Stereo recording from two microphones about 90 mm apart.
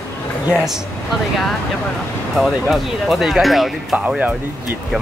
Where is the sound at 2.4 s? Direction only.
Centre (ahead or behind).